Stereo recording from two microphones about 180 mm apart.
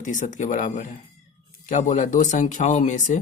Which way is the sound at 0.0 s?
45° left (ahead or behind).